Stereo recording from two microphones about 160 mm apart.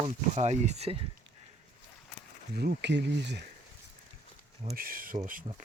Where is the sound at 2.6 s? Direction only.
85° right.